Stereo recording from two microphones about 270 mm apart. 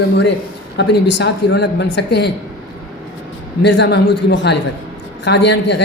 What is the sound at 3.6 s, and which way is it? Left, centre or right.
A man's voice, left.